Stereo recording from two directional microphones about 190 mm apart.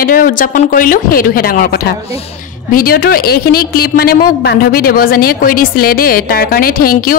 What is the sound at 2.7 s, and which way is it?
A woman's voice, 50° left (ahead or behind).